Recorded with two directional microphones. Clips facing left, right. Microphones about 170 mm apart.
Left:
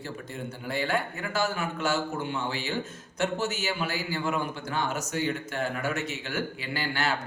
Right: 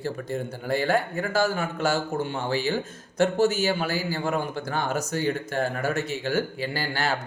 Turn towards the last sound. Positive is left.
turn(degrees=-40)  # may be behind; listen again after turning